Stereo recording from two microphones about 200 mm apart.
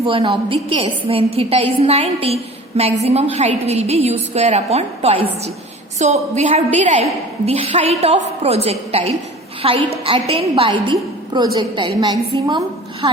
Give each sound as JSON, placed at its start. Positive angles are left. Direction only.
{"t": 0.0, "sound": "a woman's voice", "side_deg": -25}